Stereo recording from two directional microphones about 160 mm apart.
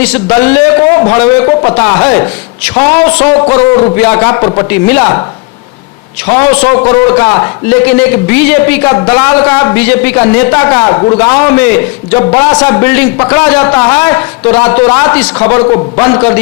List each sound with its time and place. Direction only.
0.0 s a man's voice: 10° left (ahead or behind)
4.4 s a man's voice: 20° left (ahead or behind)
6.2 s a man's voice: 15° left (ahead or behind)
10.9 s a man's voice: 30° left (ahead or behind)
11.2 s a man's voice: 10° left (ahead or behind)